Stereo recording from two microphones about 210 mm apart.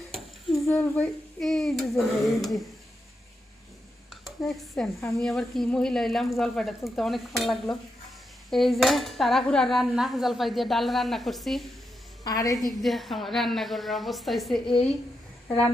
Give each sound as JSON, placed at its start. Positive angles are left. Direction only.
{"t": 0.1, "sound": "a sound", "side_deg": 0}
{"t": 0.7, "sound": "cutlery", "side_deg": 5}
{"t": 4.2, "sound": "speech", "side_deg": 0}
{"t": 5.1, "sound": "cutlery", "side_deg": 0}
{"t": 12.2, "sound": "a woman's voice", "side_deg": 15}
{"t": 12.8, "sound": "cutlery", "side_deg": 0}
{"t": 15.4, "sound": "speech", "side_deg": 5}